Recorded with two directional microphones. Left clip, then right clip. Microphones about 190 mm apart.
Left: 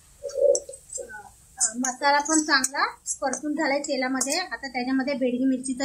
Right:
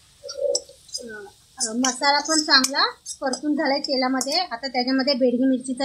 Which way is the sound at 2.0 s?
40° right (ahead or behind).